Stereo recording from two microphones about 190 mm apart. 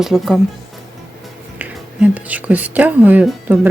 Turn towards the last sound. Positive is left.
turn(degrees=-10)  # may be behind; listen again after turning